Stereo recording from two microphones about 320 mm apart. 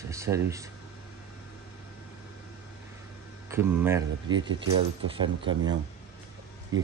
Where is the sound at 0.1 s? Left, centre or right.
Centre.